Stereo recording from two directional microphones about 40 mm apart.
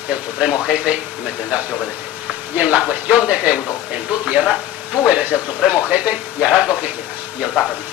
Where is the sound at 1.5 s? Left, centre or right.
Right.